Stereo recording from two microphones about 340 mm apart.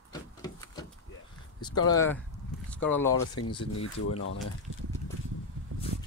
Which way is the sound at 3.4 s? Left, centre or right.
Left.